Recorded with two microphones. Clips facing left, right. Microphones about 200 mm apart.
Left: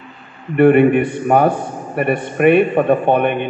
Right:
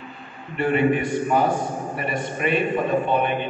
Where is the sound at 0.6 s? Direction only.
60° left (ahead or behind).